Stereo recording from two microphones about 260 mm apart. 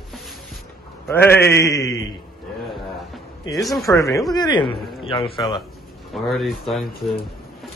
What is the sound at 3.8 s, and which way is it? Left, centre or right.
A man's voice, centre.